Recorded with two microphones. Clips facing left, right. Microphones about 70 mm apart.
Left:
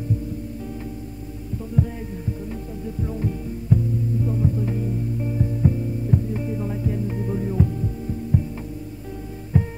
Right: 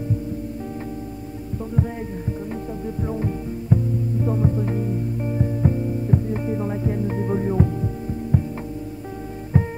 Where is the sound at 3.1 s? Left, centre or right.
Right.